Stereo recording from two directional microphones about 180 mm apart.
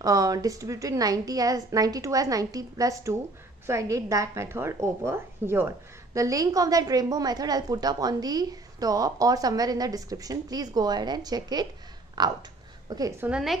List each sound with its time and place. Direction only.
0.0 s a woman's voice: 20° right (ahead or behind)
13.3 s a woman's voice: centre (ahead or behind)